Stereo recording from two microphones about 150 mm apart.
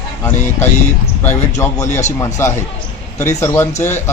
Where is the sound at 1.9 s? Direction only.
50° left (ahead or behind).